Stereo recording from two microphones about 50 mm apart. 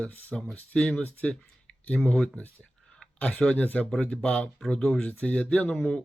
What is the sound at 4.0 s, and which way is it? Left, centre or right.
Speech, left.